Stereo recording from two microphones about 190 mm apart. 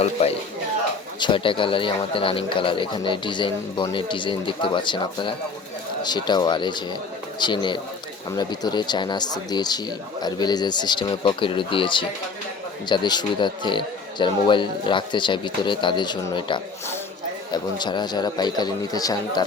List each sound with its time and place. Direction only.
0.0 s speech: 35° left (ahead or behind)